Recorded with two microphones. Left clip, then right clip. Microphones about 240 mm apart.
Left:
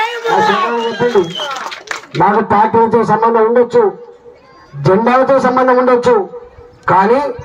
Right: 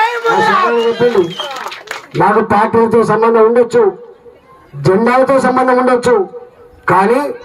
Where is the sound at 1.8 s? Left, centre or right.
Right.